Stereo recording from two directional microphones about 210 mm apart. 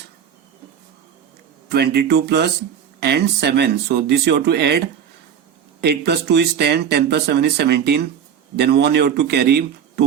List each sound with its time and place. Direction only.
1.7 s speech: 50° right (ahead or behind)
5.8 s speech: 50° right (ahead or behind)